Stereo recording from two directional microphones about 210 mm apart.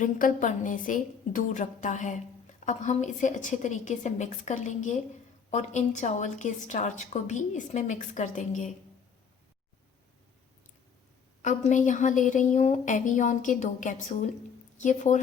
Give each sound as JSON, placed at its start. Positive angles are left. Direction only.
{"t": 0.0, "sound": "a woman's voice", "side_deg": 40}
{"t": 11.4, "sound": "a woman's voice", "side_deg": 35}